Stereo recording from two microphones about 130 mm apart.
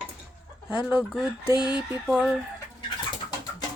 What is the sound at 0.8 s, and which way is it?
Fowl, 10° right (ahead or behind).